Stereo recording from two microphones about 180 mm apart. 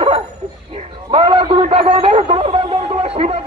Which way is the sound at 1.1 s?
35° right (ahead or behind).